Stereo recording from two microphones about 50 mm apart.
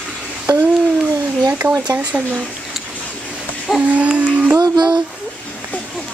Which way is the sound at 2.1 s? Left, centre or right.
Right.